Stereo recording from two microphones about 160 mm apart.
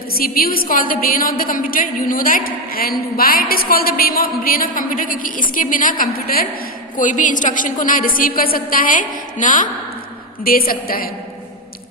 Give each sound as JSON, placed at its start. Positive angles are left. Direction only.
{"t": 0.1, "sound": "a woman's voice", "side_deg": 65}
{"t": 6.9, "sound": "a woman's voice", "side_deg": 55}
{"t": 10.4, "sound": "a woman's voice", "side_deg": 65}